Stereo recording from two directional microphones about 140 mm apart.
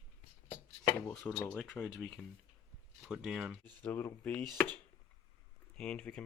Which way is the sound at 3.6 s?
15° left (ahead or behind).